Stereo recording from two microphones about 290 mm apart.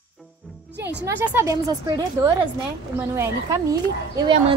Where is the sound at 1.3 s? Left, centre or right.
Centre.